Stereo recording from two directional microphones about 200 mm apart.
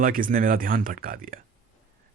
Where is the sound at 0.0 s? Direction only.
45° right (ahead or behind).